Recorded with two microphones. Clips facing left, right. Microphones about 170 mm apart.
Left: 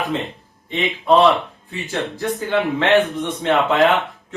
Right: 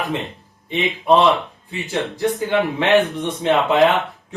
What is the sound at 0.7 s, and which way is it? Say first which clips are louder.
Speech: even; 15° right (ahead or behind).